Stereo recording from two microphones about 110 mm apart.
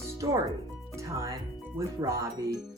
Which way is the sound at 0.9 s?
25° right (ahead or behind).